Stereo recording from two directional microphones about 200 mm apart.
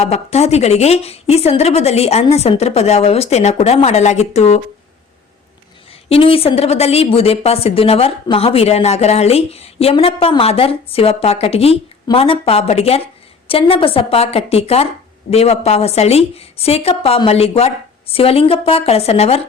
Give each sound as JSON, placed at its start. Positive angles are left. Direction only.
{"t": 0.0, "sound": "a woman's voice", "side_deg": 30}
{"t": 6.1, "sound": "a woman's voice", "side_deg": 30}